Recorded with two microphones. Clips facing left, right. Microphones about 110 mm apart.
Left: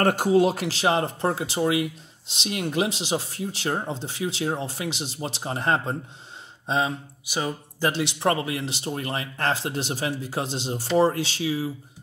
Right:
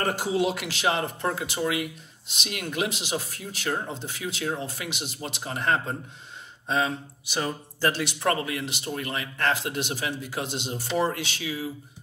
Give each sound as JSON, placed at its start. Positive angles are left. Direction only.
{"t": 0.0, "sound": "speech", "side_deg": 50}
{"t": 7.2, "sound": "speech", "side_deg": 10}
{"t": 7.9, "sound": "speech", "side_deg": 25}